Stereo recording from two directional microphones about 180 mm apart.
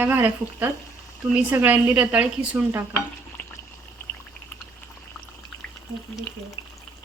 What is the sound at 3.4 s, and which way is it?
Water, 10° left (ahead or behind).